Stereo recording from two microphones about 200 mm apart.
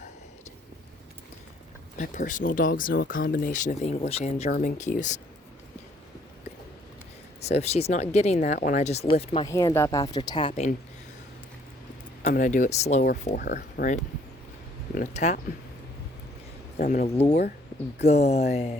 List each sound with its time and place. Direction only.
2.0 s speech: 40° left (ahead or behind)
7.4 s speech: 30° left (ahead or behind)
9.5 s speech: 15° left (ahead or behind)
12.2 s speech: 40° left (ahead or behind)
16.7 s speech: 40° left (ahead or behind)